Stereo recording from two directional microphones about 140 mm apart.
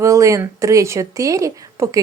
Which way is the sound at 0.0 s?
20° right (ahead or behind).